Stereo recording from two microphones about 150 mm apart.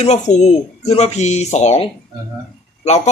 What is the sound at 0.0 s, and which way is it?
Speech, 50° left (ahead or behind).